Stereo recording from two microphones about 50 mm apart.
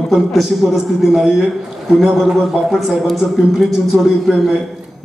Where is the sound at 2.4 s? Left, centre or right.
Centre.